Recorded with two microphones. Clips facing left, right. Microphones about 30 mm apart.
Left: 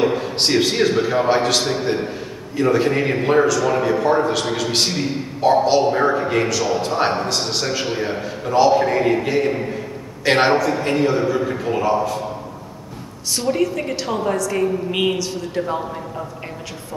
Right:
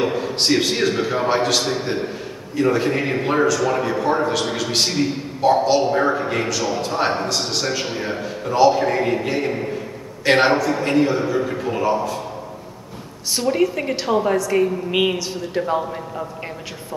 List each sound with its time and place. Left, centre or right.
0.0 s a man's voice: centre
13.4 s a man's voice: centre